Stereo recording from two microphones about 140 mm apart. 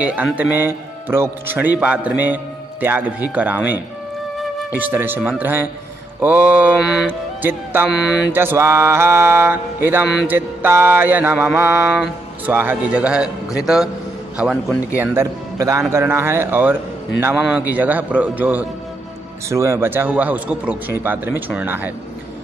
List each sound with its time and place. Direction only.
0.0 s a man's voice: 10° right (ahead or behind)
7.4 s a man's voice: 15° right (ahead or behind)
7.9 s mantra: 5° right (ahead or behind)
8.4 s a man's voice: 15° right (ahead or behind)